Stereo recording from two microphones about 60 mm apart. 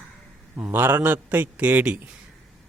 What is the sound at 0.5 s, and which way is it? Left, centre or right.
A man's voice, right.